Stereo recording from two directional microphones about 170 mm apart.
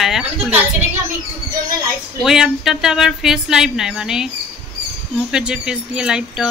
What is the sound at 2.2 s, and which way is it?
Speech, 5° right (ahead or behind).